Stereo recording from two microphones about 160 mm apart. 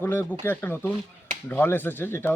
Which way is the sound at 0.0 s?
10° left (ahead or behind).